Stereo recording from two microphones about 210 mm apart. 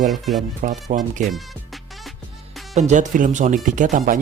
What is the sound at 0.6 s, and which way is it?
Speech, 35° right (ahead or behind).